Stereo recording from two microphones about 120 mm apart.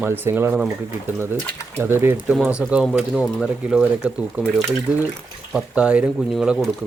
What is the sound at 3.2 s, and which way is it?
Speech, centre (ahead or behind).